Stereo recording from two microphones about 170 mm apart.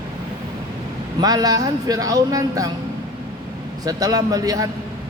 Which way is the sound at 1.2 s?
20° right (ahead or behind).